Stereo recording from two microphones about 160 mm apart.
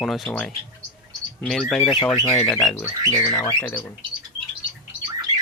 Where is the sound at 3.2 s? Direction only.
25° left (ahead or behind).